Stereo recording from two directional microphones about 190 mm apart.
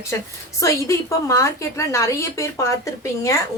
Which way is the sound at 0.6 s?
15° left (ahead or behind).